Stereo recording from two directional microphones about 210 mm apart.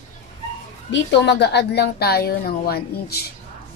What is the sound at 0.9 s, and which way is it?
A woman's voice, 55° left (ahead or behind).